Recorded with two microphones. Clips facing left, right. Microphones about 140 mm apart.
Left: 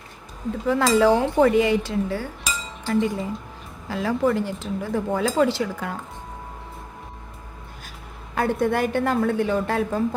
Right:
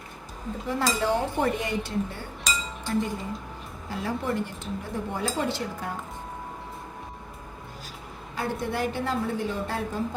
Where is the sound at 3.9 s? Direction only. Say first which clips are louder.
Left 7 dB; 90° left.